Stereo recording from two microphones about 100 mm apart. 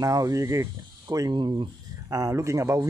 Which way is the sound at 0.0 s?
35° right (ahead or behind).